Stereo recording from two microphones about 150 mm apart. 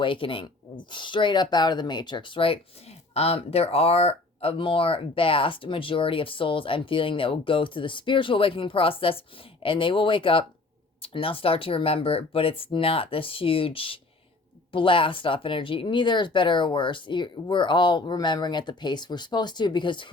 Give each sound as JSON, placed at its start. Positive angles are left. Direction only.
{"t": 0.0, "sound": "speech", "side_deg": 35}